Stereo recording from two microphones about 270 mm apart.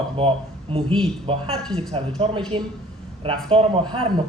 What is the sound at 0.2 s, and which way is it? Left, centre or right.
Speech, centre.